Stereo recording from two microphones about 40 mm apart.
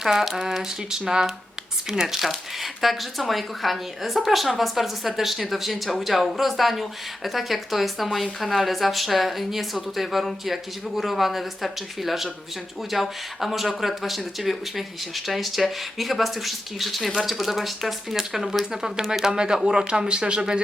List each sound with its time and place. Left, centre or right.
0.0 s speech: centre